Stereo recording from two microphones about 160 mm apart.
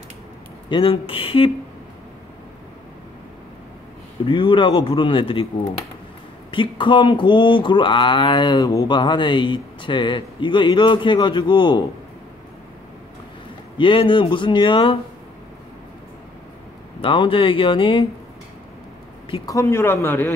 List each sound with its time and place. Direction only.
0.7 s speech: 30° left (ahead or behind)
4.3 s speech: 35° left (ahead or behind)
6.5 s speech: 30° left (ahead or behind)
13.7 s speech: 30° left (ahead or behind)
17.0 s speech: 35° left (ahead or behind)
19.4 s speech: 20° left (ahead or behind)